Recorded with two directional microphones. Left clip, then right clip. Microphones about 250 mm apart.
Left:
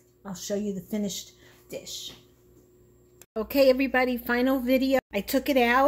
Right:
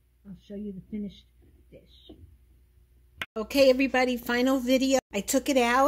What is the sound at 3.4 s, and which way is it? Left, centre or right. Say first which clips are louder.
Speech: even; centre.